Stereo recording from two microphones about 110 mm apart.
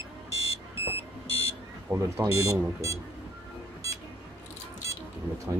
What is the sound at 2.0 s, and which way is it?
Speech, 25° right (ahead or behind).